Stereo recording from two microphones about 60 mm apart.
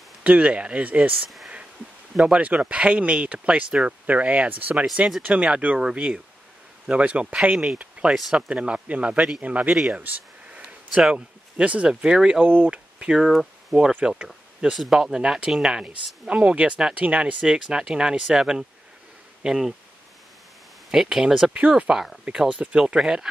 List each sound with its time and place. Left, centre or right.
0.2 s speech: right
5.8 s speech: centre
8.1 s speech: centre
8.4 s speech: centre
9.9 s a sound: right
11.0 s speech: centre
12.4 s speech: right
12.7 s a sound: centre
13.2 s speech: centre
14.0 s speech: centre
14.7 s speech: centre
20.9 s speech: centre
21.5 s speech: centre
22.6 s speech: right